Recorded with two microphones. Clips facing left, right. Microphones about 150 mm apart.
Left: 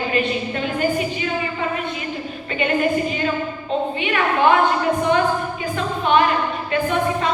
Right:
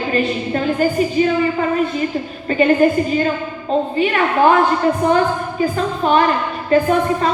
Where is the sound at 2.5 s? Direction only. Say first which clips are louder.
Right 9 dB; 40° right (ahead or behind).